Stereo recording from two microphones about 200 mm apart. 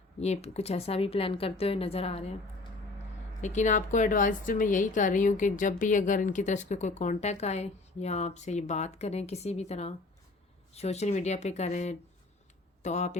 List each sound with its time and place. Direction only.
0.2 s speech: 30° left (ahead or behind)
3.4 s a woman's voice: 35° left (ahead or behind)